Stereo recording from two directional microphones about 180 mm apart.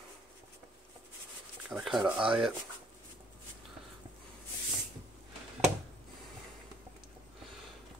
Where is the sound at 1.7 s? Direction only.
5° right (ahead or behind).